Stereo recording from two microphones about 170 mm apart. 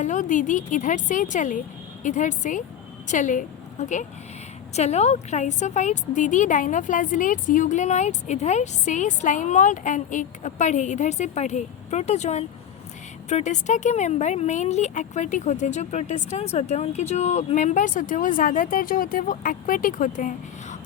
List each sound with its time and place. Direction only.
0.0 s a woman's voice: 45° left (ahead or behind)